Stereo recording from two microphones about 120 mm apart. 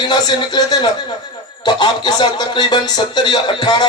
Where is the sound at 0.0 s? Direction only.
35° left (ahead or behind).